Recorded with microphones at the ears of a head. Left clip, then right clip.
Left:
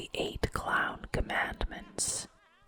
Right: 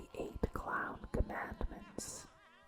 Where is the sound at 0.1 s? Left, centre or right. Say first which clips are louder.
Left 7 dB; left.